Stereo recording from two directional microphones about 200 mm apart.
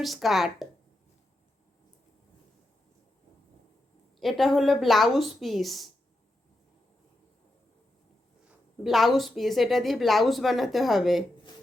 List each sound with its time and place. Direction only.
0.0 s a woman's voice: centre (ahead or behind)
4.2 s a woman's voice: centre (ahead or behind)
8.4 s a woman's voice: centre (ahead or behind)